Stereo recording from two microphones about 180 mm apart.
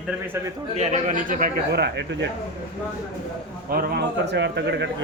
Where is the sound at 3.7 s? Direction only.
55° right (ahead or behind); by 5.0 s 80° right.